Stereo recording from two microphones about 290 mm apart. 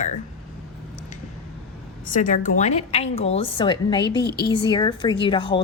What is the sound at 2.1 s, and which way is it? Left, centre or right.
A woman's voice, left.